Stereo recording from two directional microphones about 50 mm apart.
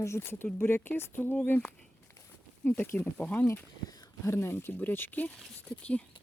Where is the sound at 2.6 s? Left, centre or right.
Left.